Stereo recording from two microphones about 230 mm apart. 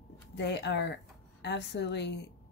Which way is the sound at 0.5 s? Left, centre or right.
Left.